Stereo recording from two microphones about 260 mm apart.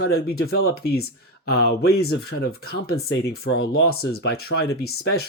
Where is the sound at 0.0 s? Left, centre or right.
Left.